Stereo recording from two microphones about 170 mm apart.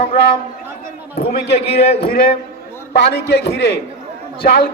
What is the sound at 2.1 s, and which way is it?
Speech, 60° left (ahead or behind).